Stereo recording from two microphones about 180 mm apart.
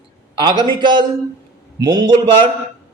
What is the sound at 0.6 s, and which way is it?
A man's voice, 25° right (ahead or behind).